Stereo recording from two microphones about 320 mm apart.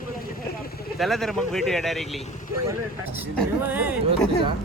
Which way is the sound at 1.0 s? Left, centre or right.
Centre.